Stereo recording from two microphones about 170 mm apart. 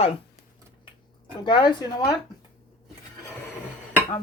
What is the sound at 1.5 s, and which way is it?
Speech, 25° left (ahead or behind).